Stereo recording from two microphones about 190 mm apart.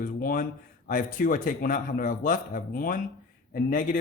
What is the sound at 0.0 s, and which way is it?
A man's voice, 45° left (ahead or behind).